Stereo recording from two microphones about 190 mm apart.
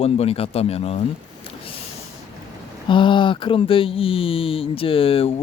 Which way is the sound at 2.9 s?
25° left (ahead or behind).